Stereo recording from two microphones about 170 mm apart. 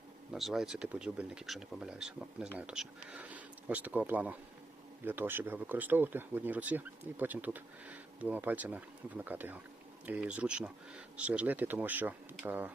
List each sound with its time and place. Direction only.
0.3 s speech: centre (ahead or behind)